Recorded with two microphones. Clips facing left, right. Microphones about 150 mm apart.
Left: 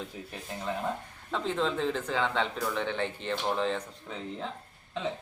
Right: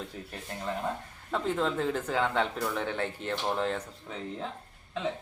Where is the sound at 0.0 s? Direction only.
Centre (ahead or behind).